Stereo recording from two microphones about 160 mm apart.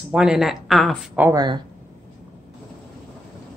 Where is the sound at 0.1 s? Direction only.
5° right (ahead or behind).